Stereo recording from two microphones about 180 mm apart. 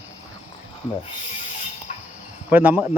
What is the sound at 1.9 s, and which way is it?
Cricket, 40° left (ahead or behind).